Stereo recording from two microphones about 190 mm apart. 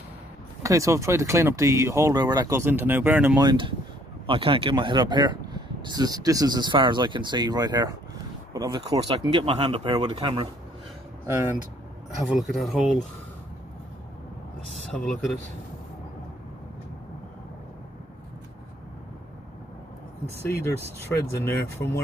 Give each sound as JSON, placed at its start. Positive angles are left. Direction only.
{"t": 0.6, "sound": "speech", "side_deg": -15}
{"t": 3.4, "sound": "speech", "side_deg": -25}
{"t": 11.2, "sound": "speech", "side_deg": -10}
{"t": 12.3, "sound": "speech", "side_deg": 0}
{"t": 21.1, "sound": "speech", "side_deg": 10}